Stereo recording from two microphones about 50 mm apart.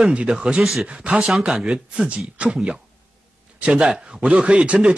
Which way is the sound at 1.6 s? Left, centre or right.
Centre.